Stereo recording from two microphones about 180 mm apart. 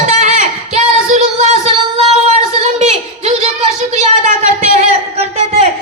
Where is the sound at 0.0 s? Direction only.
40° right (ahead or behind).